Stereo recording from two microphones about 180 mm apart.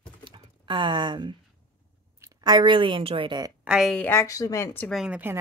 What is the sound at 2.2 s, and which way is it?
A woman's voice, 25° right (ahead or behind).